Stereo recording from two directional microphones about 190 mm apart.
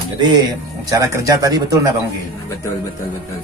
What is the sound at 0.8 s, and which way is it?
A man's voice, 20° right (ahead or behind).